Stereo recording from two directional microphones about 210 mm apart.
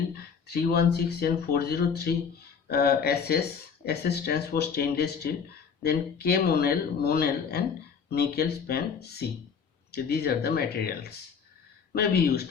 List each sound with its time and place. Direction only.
0.4 s speech: 50° left (ahead or behind)
11.9 s speech: 50° left (ahead or behind)